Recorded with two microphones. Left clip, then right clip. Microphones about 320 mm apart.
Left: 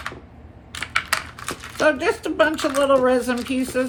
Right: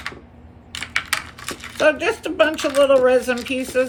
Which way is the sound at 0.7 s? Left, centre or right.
Centre.